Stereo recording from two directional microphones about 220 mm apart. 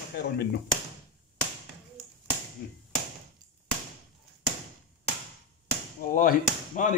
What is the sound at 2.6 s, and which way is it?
Tap, 45° left (ahead or behind).